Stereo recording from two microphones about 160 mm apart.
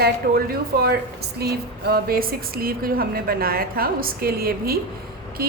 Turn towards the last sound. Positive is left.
turn(degrees=-70)  # may be behind; listen again after turning